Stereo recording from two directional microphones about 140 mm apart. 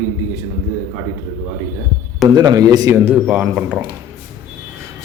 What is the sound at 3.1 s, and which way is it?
Speech, 10° right (ahead or behind).